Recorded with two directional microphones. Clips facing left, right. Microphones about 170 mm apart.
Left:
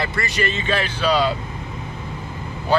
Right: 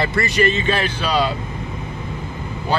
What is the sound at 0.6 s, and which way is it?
Speech, 40° right (ahead or behind).